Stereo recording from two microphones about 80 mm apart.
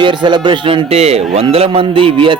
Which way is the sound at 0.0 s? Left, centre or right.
Right.